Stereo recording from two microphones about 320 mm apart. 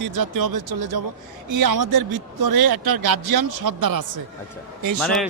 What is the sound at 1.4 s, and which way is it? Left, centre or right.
Speech, right.